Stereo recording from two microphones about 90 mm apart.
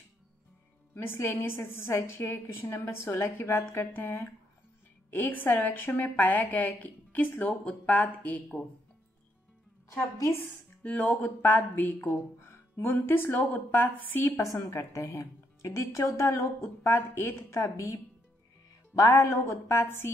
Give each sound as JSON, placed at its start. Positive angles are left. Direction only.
{"t": 0.9, "sound": "a woman's voice", "side_deg": 25}
{"t": 9.8, "sound": "a woman's voice", "side_deg": 40}
{"t": 10.3, "sound": "a woman's voice", "side_deg": 20}
{"t": 14.7, "sound": "a woman's voice", "side_deg": 35}